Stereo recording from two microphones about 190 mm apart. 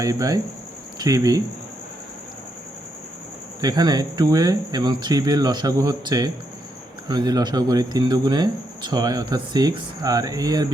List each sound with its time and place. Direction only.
0.0 s speech: 20° right (ahead or behind)
3.6 s speech: 20° right (ahead or behind)